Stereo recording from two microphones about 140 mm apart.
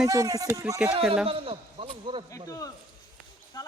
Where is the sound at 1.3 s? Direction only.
40° right (ahead or behind).